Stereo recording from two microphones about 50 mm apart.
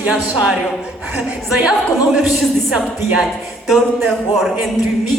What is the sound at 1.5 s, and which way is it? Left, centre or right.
A woman's voice, centre.